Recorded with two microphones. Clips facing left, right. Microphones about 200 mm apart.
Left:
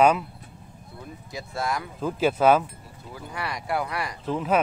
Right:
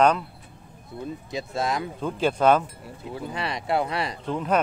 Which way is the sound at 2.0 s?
5° left (ahead or behind).